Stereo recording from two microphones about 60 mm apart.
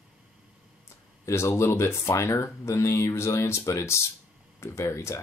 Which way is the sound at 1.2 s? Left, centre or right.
Left.